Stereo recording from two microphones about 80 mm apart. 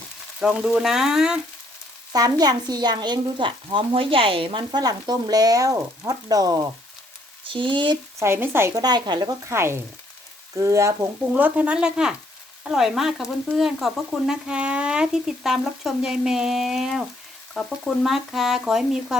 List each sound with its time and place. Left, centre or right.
0.3 s speech: centre
2.1 s frying: right
4.8 s frying: right
7.4 s frying: right
8.2 s speech: right
8.7 s speech: right
9.5 s speech: right
11.3 s speech: centre
14.4 s speech: centre